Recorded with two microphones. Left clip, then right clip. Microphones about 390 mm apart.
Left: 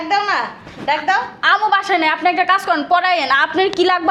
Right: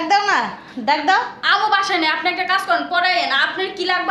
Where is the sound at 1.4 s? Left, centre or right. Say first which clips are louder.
Left 5 dB; left.